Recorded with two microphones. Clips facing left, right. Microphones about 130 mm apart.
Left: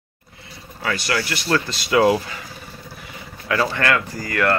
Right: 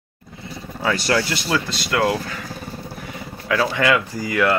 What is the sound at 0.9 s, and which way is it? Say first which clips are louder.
Speech: right 3 dB; 35° right (ahead or behind).